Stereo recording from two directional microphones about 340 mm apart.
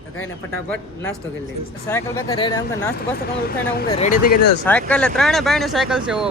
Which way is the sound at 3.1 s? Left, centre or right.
Left.